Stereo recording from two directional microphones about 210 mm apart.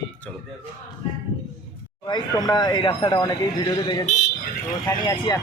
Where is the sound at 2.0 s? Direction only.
20° left (ahead or behind).